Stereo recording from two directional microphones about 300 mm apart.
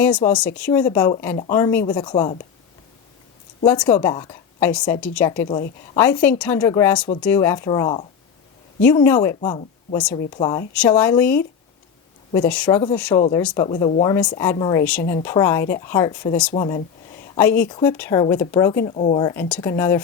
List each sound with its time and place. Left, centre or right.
0.0 s speech: centre
3.6 s speech: centre